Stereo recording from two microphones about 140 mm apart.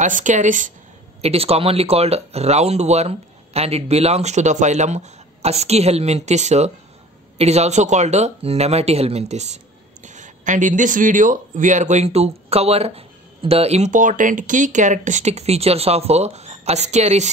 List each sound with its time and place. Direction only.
0.0 s speech: 60° right (ahead or behind)
1.2 s speech: 45° right (ahead or behind)